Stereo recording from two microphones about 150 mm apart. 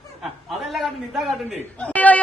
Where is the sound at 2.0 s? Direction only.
10° left (ahead or behind).